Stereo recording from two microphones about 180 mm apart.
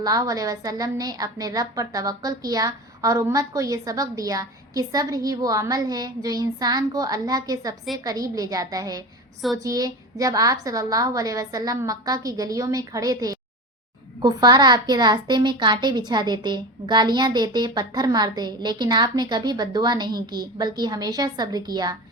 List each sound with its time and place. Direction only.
0.0 s a child's voice: 20° right (ahead or behind)